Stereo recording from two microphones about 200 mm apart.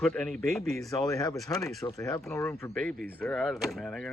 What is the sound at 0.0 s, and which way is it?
Speech, 5° left (ahead or behind).